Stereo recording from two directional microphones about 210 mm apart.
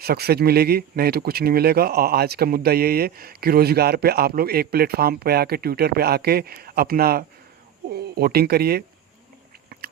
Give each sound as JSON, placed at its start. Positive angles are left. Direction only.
{"t": 0.0, "sound": "speech", "side_deg": -50}